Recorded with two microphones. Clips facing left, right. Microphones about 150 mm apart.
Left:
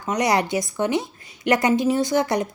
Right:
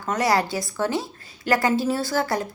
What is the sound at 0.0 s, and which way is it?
A woman's voice, 15° left (ahead or behind).